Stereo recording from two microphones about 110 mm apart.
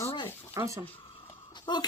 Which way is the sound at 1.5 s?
40° left (ahead or behind).